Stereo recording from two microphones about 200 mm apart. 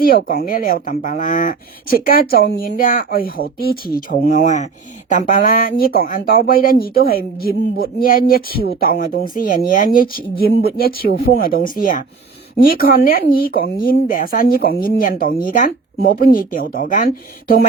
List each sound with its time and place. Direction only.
0.0 s speech: 45° left (ahead or behind)
4.3 s speech: 35° left (ahead or behind)